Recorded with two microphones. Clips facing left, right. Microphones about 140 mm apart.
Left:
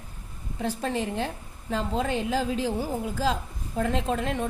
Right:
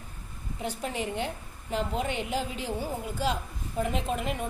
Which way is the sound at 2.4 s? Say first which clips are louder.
Left 5 dB; 90° left.